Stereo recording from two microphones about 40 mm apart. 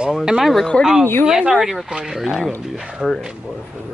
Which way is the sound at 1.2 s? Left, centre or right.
Centre.